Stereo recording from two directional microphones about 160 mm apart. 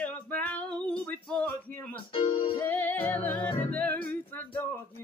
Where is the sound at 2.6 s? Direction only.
10° left (ahead or behind).